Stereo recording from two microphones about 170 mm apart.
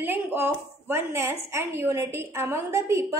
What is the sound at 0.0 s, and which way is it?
A woman's voice, 10° right (ahead or behind).